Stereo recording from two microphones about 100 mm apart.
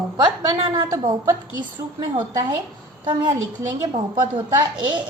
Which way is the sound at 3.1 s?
55° right (ahead or behind).